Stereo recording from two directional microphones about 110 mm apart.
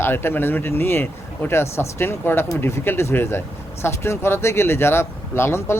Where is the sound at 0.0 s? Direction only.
20° left (ahead or behind).